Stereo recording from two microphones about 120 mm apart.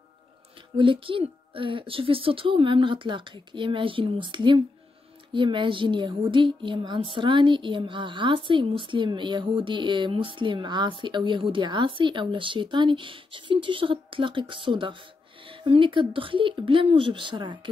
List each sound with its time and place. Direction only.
0.7 s a woman's voice: 45° right (ahead or behind)